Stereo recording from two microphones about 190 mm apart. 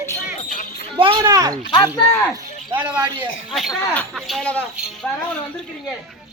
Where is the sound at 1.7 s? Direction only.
20° left (ahead or behind).